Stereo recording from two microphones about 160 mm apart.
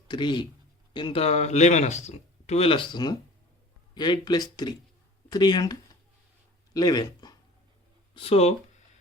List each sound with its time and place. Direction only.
0.1 s speech: 30° left (ahead or behind)
6.7 s speech: 25° left (ahead or behind)
8.1 s speech: 40° left (ahead or behind)